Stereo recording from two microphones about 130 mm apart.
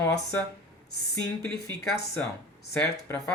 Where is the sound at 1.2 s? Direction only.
25° left (ahead or behind).